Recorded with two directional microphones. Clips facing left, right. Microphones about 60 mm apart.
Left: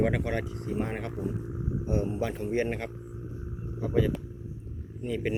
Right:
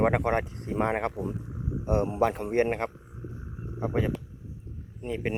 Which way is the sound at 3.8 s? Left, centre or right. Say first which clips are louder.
Left 1 dB; right.